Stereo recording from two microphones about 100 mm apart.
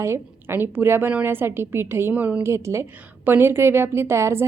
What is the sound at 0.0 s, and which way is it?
A woman's voice, 25° right (ahead or behind).